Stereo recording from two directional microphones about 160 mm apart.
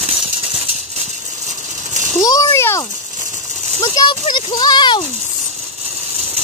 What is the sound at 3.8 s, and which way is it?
A child's voice, 25° left (ahead or behind).